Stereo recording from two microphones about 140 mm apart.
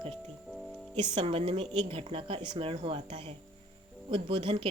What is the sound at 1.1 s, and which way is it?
A woman's voice, 40° right (ahead or behind).